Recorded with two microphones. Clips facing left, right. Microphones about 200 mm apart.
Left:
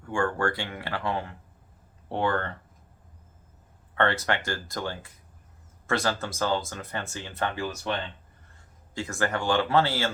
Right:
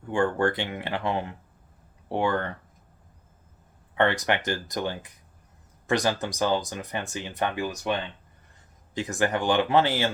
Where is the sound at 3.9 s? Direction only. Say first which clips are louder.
Right 2 dB; 15° right (ahead or behind).